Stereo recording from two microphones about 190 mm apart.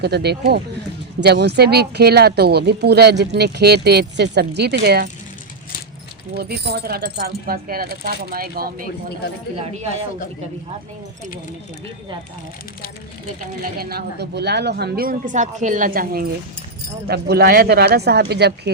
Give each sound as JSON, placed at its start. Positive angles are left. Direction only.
{"t": 0.0, "sound": "a woman's voice", "side_deg": -60}
{"t": 6.3, "sound": "speech", "side_deg": -60}
{"t": 13.6, "sound": "a woman's voice", "side_deg": -55}